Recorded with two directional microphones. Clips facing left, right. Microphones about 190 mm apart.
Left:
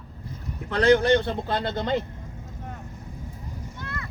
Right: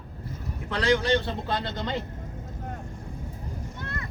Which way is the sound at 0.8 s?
55° left (ahead or behind).